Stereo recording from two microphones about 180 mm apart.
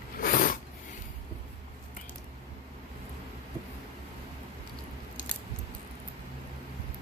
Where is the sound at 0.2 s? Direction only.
50° left (ahead or behind).